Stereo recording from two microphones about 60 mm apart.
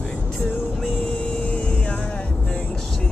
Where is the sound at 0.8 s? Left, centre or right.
Centre.